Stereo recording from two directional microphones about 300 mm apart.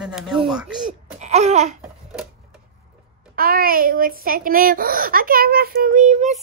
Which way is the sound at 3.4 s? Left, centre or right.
Right.